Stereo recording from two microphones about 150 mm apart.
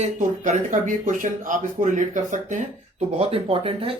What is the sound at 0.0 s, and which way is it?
Speech, 55° right (ahead or behind).